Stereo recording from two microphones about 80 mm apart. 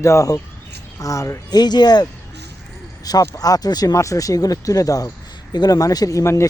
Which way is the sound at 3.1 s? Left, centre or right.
Left.